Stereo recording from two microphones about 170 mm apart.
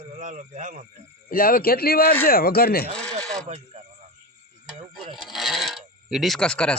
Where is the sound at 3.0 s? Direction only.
5° left (ahead or behind).